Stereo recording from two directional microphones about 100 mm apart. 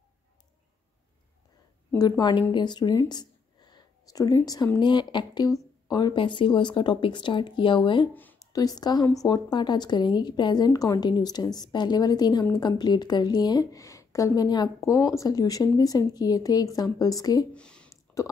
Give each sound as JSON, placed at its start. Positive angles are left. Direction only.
{"t": 2.0, "sound": "a woman's voice", "side_deg": 45}
{"t": 3.0, "sound": "a sound", "side_deg": 45}
{"t": 4.7, "sound": "a woman's voice", "side_deg": 50}
{"t": 8.1, "sound": "speech", "side_deg": 20}
{"t": 8.5, "sound": "a woman's voice", "side_deg": 40}
{"t": 17.6, "sound": "a sound", "side_deg": 10}